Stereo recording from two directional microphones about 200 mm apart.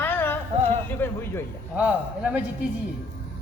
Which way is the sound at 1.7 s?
5° right (ahead or behind).